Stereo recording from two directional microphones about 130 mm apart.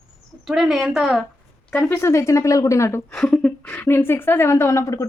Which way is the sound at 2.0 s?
20° left (ahead or behind).